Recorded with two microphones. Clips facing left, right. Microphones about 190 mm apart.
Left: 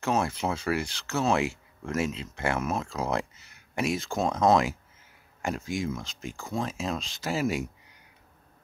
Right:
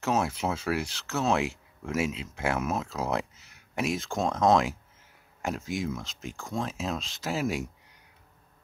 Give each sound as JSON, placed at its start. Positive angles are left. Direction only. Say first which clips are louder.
{"t": 0.0, "sound": "speech", "louder": "even", "side_deg": -5}